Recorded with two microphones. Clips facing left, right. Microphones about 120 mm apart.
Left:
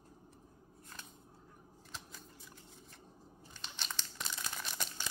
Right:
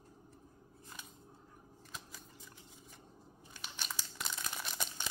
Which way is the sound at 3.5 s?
10° right (ahead or behind).